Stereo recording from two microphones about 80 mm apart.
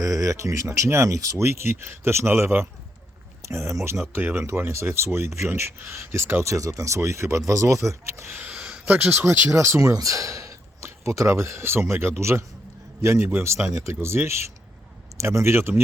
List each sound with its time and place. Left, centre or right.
0.0 s speech: right
4.1 s a man's voice: right